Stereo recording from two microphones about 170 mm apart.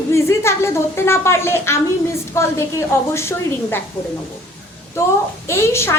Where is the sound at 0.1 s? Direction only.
15° left (ahead or behind).